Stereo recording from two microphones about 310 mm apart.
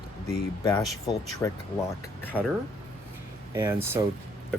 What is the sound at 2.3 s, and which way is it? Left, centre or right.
Speech, centre.